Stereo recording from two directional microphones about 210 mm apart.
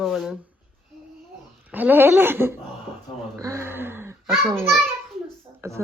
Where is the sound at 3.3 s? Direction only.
15° right (ahead or behind).